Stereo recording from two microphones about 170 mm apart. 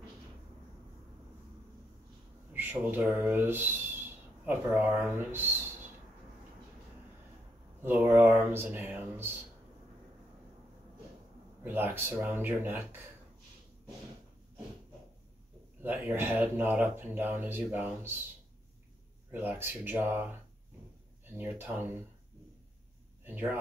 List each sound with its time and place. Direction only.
2.5 s speech: 10° right (ahead or behind)
7.8 s speech: 10° right (ahead or behind)
11.6 s speech: 10° right (ahead or behind)
15.8 s speech: 10° right (ahead or behind)
19.3 s speech: 10° right (ahead or behind)
21.4 s speech: 10° right (ahead or behind)
23.2 s speech: 10° right (ahead or behind)